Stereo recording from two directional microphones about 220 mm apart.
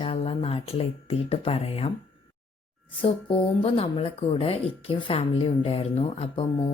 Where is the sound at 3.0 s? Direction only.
25° left (ahead or behind).